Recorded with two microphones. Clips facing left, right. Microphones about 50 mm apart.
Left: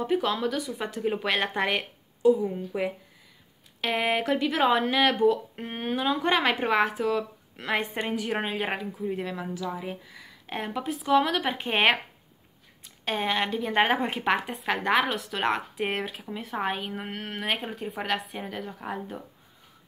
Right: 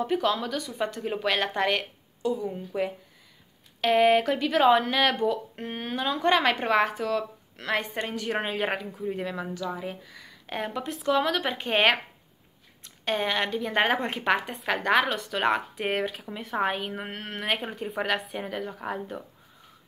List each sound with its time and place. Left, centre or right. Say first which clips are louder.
0.0 s speech: even; centre